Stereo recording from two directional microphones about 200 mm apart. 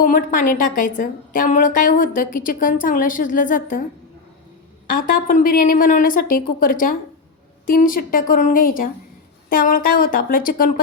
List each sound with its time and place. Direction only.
0.0 s a woman's voice: 40° left (ahead or behind)
4.9 s a woman's voice: 45° left (ahead or behind)